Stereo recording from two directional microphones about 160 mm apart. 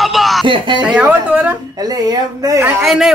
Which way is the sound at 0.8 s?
5° right (ahead or behind).